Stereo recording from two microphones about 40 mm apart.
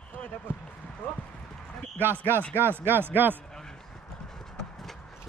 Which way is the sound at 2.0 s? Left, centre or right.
Right.